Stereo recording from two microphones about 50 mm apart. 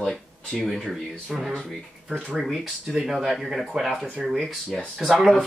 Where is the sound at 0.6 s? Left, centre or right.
Centre.